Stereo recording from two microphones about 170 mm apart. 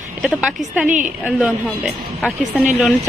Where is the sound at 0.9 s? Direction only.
45° right (ahead or behind).